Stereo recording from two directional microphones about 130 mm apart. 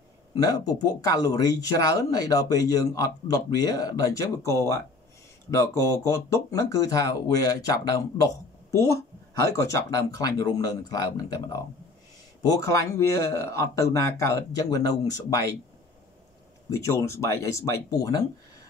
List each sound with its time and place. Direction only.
0.3 s speech: 30° left (ahead or behind)
12.5 s speech: 25° left (ahead or behind)
16.7 s speech: 20° left (ahead or behind)